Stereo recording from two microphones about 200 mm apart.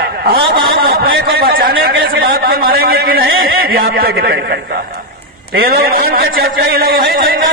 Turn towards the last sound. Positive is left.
turn(degrees=-45)  # may be behind; listen again after turning